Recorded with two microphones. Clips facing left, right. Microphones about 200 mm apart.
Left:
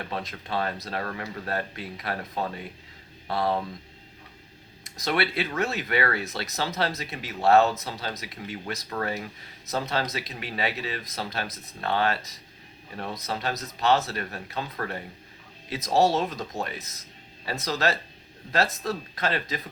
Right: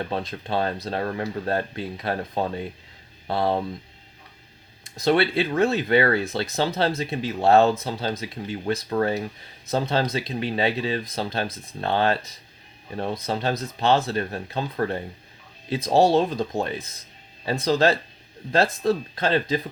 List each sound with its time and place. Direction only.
0.0 s speech: 30° right (ahead or behind)
4.8 s speech: 30° right (ahead or behind)
13.2 s speech: 30° right (ahead or behind)